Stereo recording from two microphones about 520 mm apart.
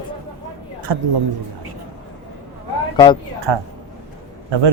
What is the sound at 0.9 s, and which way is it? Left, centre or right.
Speech, right.